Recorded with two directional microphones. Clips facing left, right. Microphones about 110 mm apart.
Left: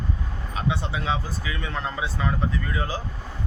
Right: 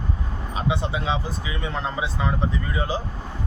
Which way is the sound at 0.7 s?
20° right (ahead or behind).